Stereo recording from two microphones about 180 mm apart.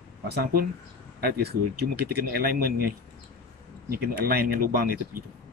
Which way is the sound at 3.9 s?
60° right (ahead or behind).